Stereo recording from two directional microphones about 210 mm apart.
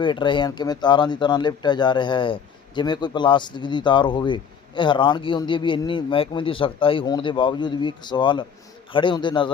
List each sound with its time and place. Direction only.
0.0 s speech: 20° left (ahead or behind)